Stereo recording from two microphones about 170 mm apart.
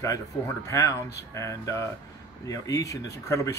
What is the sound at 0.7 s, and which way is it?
Speech, 15° left (ahead or behind).